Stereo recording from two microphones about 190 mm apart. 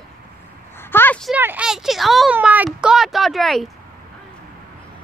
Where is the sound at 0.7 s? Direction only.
10° left (ahead or behind).